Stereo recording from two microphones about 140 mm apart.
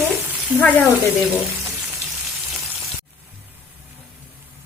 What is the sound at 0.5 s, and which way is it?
Speech, 10° right (ahead or behind).